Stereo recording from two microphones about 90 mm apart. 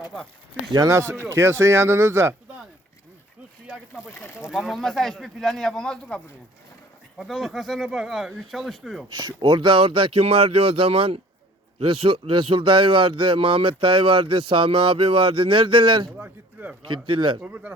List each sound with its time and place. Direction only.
0.7 s speech: 40° right (ahead or behind)
3.7 s speech: 10° right (ahead or behind)
4.1 s speech: 20° left (ahead or behind)
4.4 s speech: 5° right (ahead or behind)
9.4 s speech: 65° right (ahead or behind)
16.1 s speech: 20° right (ahead or behind)
16.8 s speech: 65° right (ahead or behind)
17.4 s speech: 15° right (ahead or behind)